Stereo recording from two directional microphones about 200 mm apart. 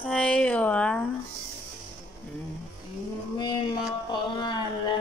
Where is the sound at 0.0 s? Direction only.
5° left (ahead or behind).